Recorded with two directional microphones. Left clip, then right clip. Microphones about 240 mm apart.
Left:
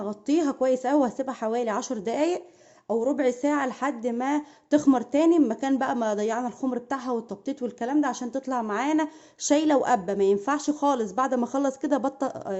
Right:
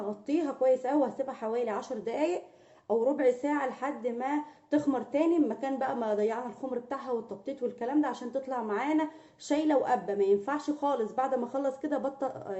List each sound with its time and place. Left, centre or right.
0.3 s a woman's voice: left